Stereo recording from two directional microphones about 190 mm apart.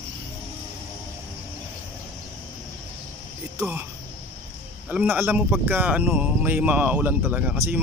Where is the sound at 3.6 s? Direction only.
10° right (ahead or behind).